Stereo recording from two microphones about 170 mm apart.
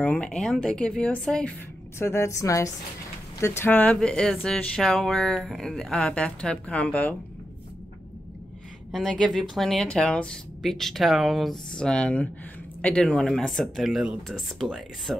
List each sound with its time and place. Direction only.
0.0 s a woman's voice: 5° left (ahead or behind)
8.9 s speech: 5° left (ahead or behind)